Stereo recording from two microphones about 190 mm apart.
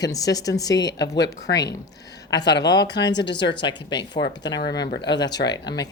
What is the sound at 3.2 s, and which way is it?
Speech, 65° left (ahead or behind).